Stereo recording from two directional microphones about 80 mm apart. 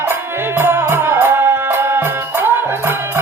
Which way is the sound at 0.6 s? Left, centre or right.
Right.